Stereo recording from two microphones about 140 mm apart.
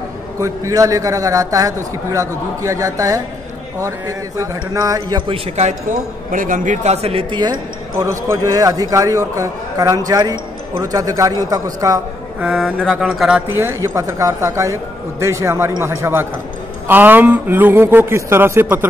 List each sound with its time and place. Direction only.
0.4 s speech: 25° right (ahead or behind)
4.4 s speech: 25° right (ahead or behind)
5.3 s speech: 55° right (ahead or behind); by 12.0 s 25° right (ahead or behind)
12.4 s a man's voice: 10° right (ahead or behind)
12.6 s speech: centre (ahead or behind)
13.5 s a man's voice: 20° right (ahead or behind)